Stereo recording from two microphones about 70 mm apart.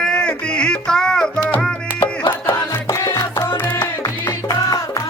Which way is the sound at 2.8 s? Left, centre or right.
Left.